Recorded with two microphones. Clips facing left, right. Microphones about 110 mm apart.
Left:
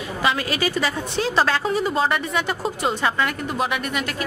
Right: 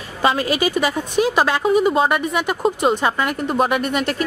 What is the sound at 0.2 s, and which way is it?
Speech, 30° right (ahead or behind).